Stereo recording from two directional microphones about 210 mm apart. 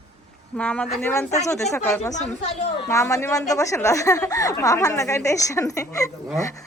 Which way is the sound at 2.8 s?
15° left (ahead or behind).